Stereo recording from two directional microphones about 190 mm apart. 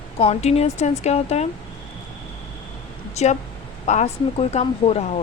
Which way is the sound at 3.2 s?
35° left (ahead or behind).